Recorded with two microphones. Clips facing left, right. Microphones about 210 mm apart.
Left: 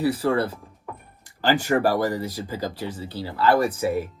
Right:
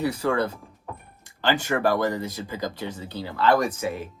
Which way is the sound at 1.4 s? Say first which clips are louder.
Left 3 dB; 40° left (ahead or behind).